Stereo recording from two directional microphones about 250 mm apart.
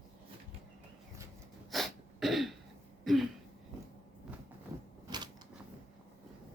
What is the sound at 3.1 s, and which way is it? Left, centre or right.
Speech, centre.